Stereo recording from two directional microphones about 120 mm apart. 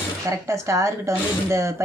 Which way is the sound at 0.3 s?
25° right (ahead or behind).